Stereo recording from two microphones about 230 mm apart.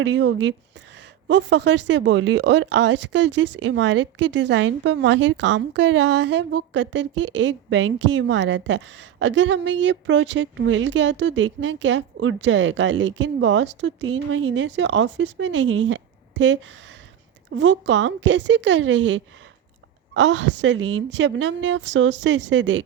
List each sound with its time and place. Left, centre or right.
0.0 s speech: right